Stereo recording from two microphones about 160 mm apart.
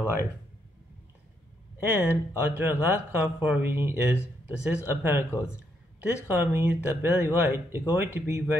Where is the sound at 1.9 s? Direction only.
10° right (ahead or behind).